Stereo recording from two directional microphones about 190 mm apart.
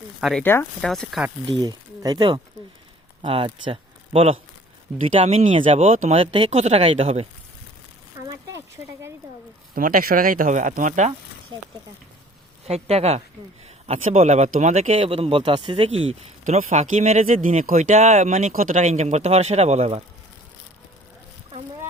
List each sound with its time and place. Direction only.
0.2 s speech: centre (ahead or behind)
0.4 s speech: 10° left (ahead or behind)
1.5 s speech: 20° right (ahead or behind)
8.3 s a sound: 15° right (ahead or behind)
9.7 s speech: 45° right (ahead or behind)
12.6 s speech: 35° right (ahead or behind)